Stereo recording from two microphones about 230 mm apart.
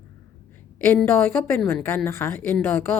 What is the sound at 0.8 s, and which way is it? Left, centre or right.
Speech, centre.